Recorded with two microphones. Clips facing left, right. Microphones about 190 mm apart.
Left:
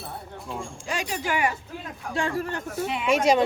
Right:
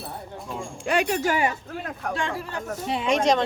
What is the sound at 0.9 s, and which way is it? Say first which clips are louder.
Speech: right 7 dB; 60° right (ahead or behind).